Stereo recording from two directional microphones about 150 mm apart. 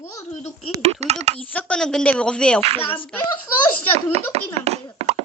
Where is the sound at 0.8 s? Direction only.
45° right (ahead or behind).